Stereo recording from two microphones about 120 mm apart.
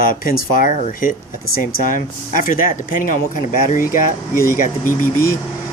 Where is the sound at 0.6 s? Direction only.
90° left.